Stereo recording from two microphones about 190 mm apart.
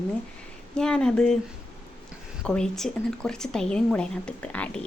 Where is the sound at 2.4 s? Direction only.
5° left (ahead or behind).